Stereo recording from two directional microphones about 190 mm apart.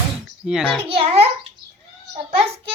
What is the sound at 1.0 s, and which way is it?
Speech, 30° right (ahead or behind).